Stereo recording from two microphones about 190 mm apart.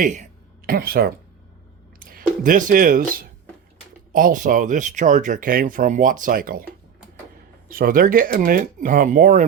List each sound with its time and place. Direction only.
0.0 s speech: 45° right (ahead or behind)
7.7 s speech: 50° right (ahead or behind)